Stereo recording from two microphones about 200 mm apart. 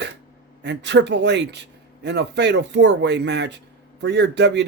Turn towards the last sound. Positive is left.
turn(degrees=-60)  # may be behind; listen again after turning